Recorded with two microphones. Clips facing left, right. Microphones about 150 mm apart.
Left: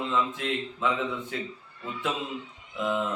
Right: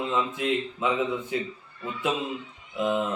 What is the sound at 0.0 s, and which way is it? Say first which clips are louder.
Speech: right 2 dB; 15° right (ahead or behind).